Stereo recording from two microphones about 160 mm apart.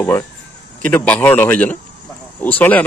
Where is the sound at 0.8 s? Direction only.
10° left (ahead or behind).